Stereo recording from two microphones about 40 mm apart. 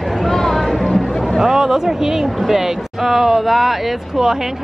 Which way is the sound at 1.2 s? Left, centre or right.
Centre.